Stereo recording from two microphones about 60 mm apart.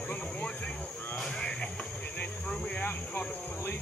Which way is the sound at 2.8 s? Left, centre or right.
Left.